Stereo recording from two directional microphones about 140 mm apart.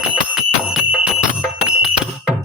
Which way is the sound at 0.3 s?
5° right (ahead or behind).